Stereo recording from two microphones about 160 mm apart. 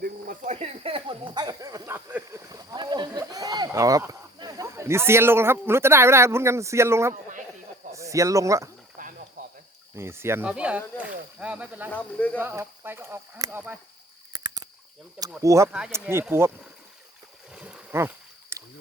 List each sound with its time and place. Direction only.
0.0 s cricket: 60° right (ahead or behind)
0.5 s a sound: 40° right (ahead or behind); by 2.0 s 20° right (ahead or behind)
2.0 s a sound: 10° right (ahead or behind)
2.5 s a sound: 25° right (ahead or behind)
7.9 s speech: 20° right (ahead or behind)
9.0 s snake: 60° right (ahead or behind)
9.9 s speech: 15° right (ahead or behind)
11.9 s speech: 10° left (ahead or behind)
12.4 s speech: 15° right (ahead or behind)
14.3 s a sound: 25° right (ahead or behind)
15.4 s speech: 20° right (ahead or behind)
17.5 s boat: 5° right (ahead or behind)
18.5 s rowboat: 15° right (ahead or behind)